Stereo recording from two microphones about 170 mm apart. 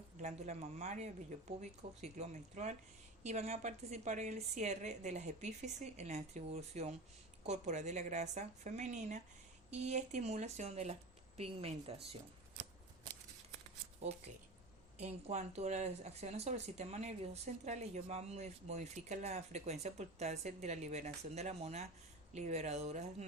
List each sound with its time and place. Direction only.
0.2 s speech: 45° right (ahead or behind)
14.9 s speech: 40° right (ahead or behind)